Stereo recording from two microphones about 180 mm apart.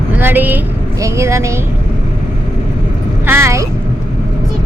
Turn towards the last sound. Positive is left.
turn(degrees=-15)  # may be behind; listen again after turning